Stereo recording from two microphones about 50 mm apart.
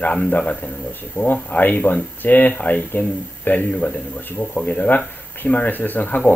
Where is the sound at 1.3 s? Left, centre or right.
Left.